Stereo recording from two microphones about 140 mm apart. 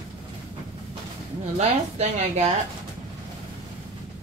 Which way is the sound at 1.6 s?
50° right (ahead or behind).